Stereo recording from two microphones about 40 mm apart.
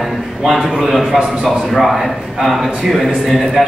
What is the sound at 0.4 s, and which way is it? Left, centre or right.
A man's voice, centre.